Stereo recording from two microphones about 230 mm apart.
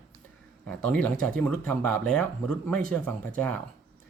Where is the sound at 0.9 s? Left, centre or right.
Centre.